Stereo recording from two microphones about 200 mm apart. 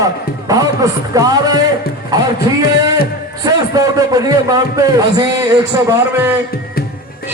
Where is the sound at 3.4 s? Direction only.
20° right (ahead or behind).